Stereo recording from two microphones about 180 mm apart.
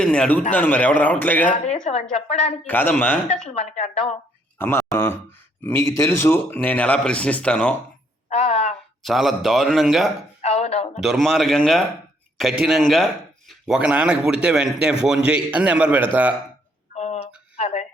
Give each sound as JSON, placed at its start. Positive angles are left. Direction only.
{"t": 0.0, "sound": "speech", "side_deg": 5}
{"t": 1.6, "sound": "a woman's voice", "side_deg": 35}
{"t": 2.6, "sound": "speech", "side_deg": 10}
{"t": 3.5, "sound": "a woman's voice", "side_deg": 35}
{"t": 4.5, "sound": "speech", "side_deg": 10}
{"t": 8.3, "sound": "a sound", "side_deg": 35}
{"t": 9.0, "sound": "a man's voice", "side_deg": 0}
{"t": 10.4, "sound": "a woman's voice", "side_deg": 35}
{"t": 11.0, "sound": "a man's voice", "side_deg": 0}
{"t": 16.9, "sound": "a sound", "side_deg": 40}